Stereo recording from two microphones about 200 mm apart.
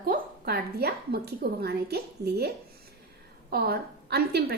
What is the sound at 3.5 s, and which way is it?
A woman's voice, 50° right (ahead or behind).